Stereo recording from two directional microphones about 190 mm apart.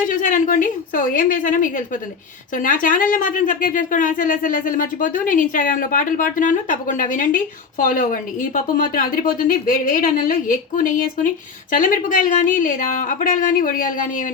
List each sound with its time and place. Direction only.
0.0 s a woman's voice: 45° left (ahead or behind)